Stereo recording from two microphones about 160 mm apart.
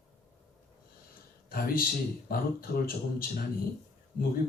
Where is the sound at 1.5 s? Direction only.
65° left (ahead or behind).